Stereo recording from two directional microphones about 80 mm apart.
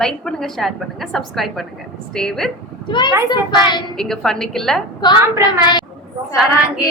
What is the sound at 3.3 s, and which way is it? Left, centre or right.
Speech, left.